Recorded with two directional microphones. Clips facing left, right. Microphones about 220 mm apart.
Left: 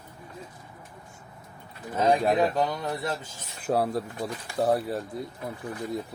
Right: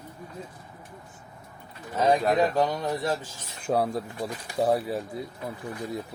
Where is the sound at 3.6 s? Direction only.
5° left (ahead or behind).